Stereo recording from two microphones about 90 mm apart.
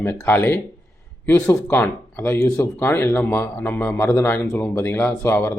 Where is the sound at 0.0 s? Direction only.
25° left (ahead or behind).